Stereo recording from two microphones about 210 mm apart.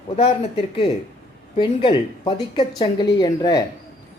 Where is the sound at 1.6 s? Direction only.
25° left (ahead or behind).